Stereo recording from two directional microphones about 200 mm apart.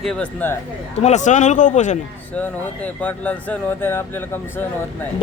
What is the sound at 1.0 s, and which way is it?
Speech, 35° left (ahead or behind).